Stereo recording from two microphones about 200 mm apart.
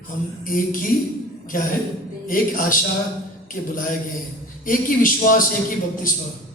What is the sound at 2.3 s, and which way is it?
A man's voice, 45° left (ahead or behind).